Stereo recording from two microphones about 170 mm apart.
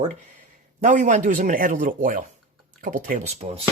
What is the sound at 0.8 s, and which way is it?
Speech, 50° right (ahead or behind).